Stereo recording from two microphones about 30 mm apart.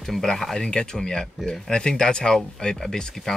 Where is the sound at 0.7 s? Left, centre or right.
Left.